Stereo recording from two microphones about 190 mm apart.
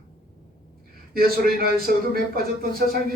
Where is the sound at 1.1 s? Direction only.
50° right (ahead or behind).